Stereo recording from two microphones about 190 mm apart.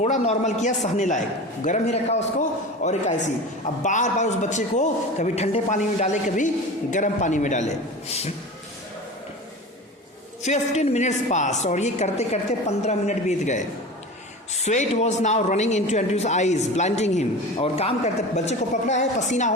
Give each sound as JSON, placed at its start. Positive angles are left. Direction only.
{"t": 0.0, "sound": "a woman's voice", "side_deg": 35}
{"t": 10.4, "sound": "a woman's voice", "side_deg": 35}